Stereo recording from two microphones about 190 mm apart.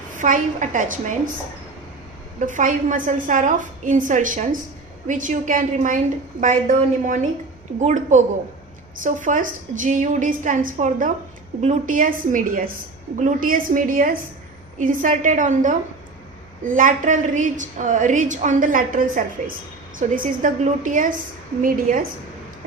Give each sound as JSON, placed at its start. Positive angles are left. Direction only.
{"t": 0.1, "sound": "a woman's voice", "side_deg": -45}
{"t": 2.5, "sound": "a woman's voice", "side_deg": -45}